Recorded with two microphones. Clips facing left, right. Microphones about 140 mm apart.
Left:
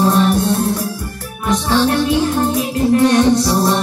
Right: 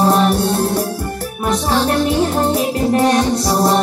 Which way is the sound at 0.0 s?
30° right (ahead or behind).